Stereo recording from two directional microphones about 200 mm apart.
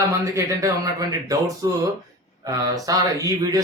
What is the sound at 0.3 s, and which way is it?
Speech, 15° right (ahead or behind).